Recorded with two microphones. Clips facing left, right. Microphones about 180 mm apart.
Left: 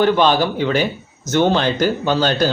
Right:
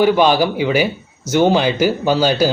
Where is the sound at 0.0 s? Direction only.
10° right (ahead or behind).